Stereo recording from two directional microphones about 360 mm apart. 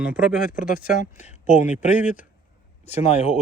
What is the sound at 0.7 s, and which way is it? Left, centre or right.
Speech, left.